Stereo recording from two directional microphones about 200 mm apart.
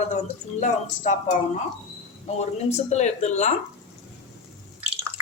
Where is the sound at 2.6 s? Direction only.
35° left (ahead or behind).